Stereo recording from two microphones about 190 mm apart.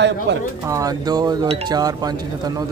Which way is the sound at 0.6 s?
15° right (ahead or behind).